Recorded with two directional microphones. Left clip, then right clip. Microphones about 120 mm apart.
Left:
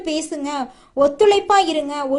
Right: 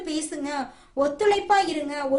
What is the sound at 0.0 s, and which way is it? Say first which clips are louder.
A woman's voice: left 6 dB; 55° left (ahead or behind).